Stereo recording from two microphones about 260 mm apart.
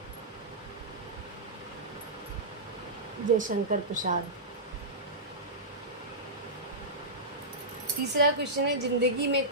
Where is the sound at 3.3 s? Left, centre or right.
Right.